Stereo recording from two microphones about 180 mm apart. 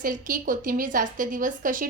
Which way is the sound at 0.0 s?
50° right (ahead or behind).